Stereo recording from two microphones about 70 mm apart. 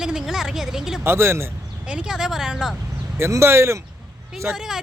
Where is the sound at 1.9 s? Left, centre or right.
Centre.